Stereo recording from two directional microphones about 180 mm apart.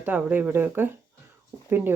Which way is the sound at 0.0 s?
10° right (ahead or behind).